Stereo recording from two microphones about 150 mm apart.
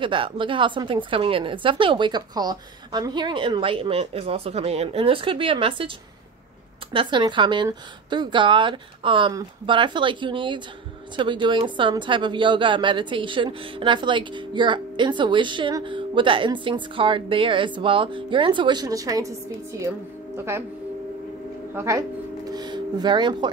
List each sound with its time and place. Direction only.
0.0 s speech: 35° right (ahead or behind)
6.9 s speech: 35° right (ahead or behind)
20.3 s speech: 15° right (ahead or behind)
21.7 s speech: 20° right (ahead or behind)
22.5 s music: 25° right (ahead or behind)